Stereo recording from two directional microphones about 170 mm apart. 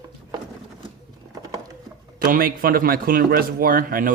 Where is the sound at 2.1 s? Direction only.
55° right (ahead or behind).